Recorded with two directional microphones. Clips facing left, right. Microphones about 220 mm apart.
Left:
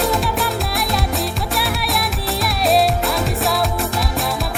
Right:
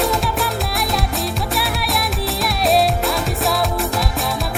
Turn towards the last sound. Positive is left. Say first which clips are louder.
# left 1 dB
turn(degrees=0)  # may be behind; listen again after turning